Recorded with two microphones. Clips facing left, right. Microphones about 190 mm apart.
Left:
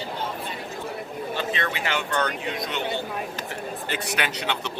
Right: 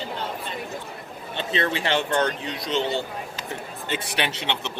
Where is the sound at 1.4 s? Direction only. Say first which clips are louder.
Right 5 dB; 30° right (ahead or behind).